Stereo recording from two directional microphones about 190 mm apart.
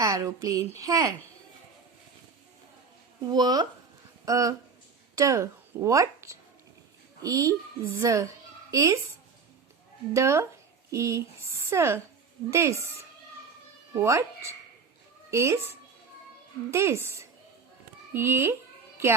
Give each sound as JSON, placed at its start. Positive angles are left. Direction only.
{"t": 0.0, "sound": "a woman's voice", "side_deg": -15}
{"t": 3.2, "sound": "a woman's voice", "side_deg": -20}
{"t": 10.1, "sound": "a woman's voice", "side_deg": -15}
{"t": 16.7, "sound": "a woman's voice", "side_deg": -15}